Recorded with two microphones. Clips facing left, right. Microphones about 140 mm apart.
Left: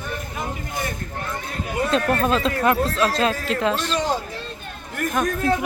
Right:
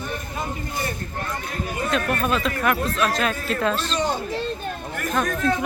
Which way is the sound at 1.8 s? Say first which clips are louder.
Left 3 dB; 30° left (ahead or behind).